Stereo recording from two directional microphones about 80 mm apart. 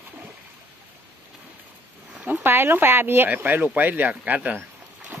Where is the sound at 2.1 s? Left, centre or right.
Centre.